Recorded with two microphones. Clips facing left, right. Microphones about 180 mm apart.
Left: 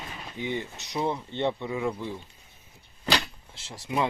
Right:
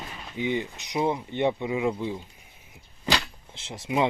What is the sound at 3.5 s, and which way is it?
Speech, 20° right (ahead or behind).